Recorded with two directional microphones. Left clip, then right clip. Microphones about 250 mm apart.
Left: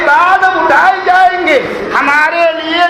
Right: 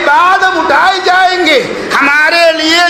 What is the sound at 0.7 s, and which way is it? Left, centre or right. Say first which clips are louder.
Music: even; right.